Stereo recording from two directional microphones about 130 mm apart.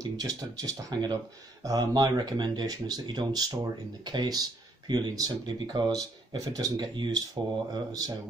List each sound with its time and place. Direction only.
0.0 s speech: 30° right (ahead or behind)